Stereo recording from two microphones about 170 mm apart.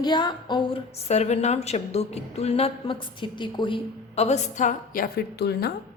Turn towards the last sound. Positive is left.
turn(degrees=70)  # may be behind; listen again after turning